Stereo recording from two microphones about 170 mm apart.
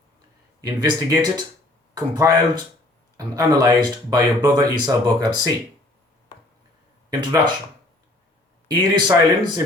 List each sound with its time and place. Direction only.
0.6 s speech: 20° right (ahead or behind)
7.1 s speech: 25° right (ahead or behind)
8.6 s speech: 25° right (ahead or behind)